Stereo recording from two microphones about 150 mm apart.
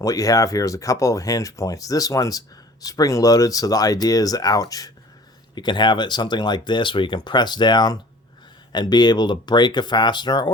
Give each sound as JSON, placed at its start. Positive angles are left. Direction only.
{"t": 0.0, "sound": "speech", "side_deg": 25}